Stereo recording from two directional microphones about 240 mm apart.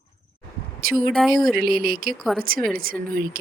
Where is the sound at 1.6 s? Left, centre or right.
Right.